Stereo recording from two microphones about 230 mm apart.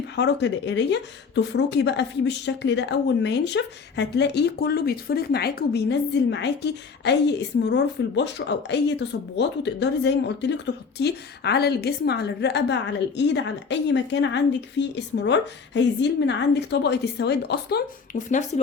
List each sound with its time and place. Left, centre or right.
0.2 s speech: left